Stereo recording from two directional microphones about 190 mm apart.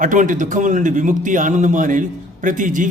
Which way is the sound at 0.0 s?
45° right (ahead or behind).